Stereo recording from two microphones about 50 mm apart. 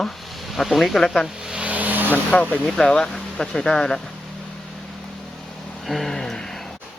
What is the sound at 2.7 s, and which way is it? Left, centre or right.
Speech, centre.